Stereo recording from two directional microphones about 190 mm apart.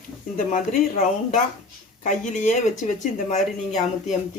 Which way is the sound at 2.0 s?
40° left (ahead or behind).